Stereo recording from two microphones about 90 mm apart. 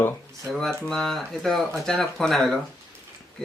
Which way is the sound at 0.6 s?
5° left (ahead or behind).